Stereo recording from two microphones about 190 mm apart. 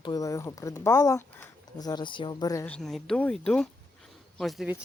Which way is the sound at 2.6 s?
5° left (ahead or behind).